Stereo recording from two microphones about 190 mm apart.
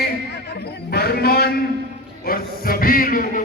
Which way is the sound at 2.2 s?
50° left (ahead or behind).